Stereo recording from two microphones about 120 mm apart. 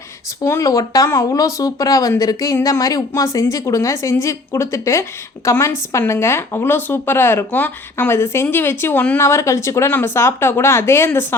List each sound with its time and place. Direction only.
0.4 s a woman's voice: 25° left (ahead or behind)